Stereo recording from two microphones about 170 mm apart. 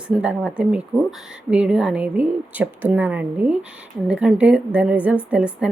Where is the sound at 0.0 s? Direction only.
5° right (ahead or behind).